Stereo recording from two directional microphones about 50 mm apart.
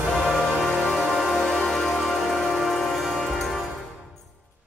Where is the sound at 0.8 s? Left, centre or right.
Centre.